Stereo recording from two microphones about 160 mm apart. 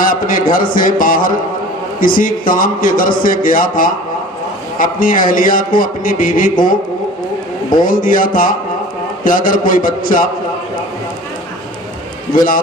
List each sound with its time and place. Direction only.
0.0 s a man's voice: 60° left (ahead or behind)
7.9 s a man's voice: 60° left (ahead or behind)
12.3 s a man's voice: 60° left (ahead or behind)